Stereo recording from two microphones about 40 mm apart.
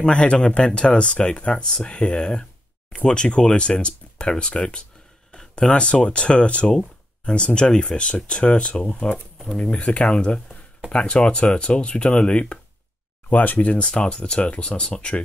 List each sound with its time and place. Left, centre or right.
0.0 s speech: left
6.7 s a sound: centre
7.3 s speech: left
13.3 s speech: left
13.7 s speech: left